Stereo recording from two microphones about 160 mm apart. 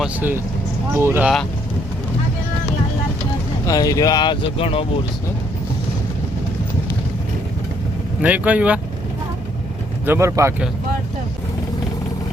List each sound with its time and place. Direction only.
0.0 s speech: 10° right (ahead or behind)
3.7 s speech: 20° left (ahead or behind)
8.2 s speech: 10° right (ahead or behind)
10.1 s speech: 15° right (ahead or behind)